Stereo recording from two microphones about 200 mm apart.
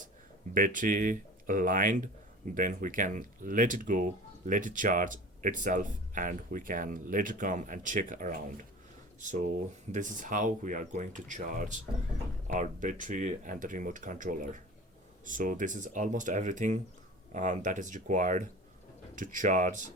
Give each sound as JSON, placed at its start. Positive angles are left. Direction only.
{"t": 0.5, "sound": "speech", "side_deg": -40}